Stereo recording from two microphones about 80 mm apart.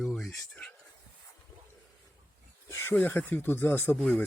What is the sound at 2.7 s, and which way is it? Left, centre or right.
Speech, left.